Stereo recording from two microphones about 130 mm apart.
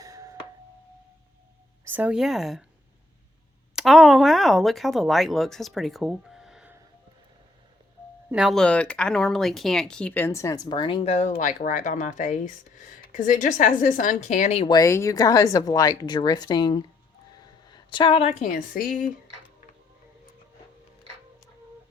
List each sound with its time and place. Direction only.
0.0 s a sound: 25° right (ahead or behind)
1.8 s speech: 15° right (ahead or behind)
3.8 s speech: 5° right (ahead or behind)
8.3 s speech: 5° right (ahead or behind)
8.5 s speech: 10° left (ahead or behind); by 11.0 s 40° left (ahead or behind)
11.0 s speech: 55° left (ahead or behind)
14.7 s speech: 25° left (ahead or behind)
17.3 s a sound: 35° left (ahead or behind); by 18.4 s 50° left (ahead or behind)
18.4 s a woman's voice: 90° left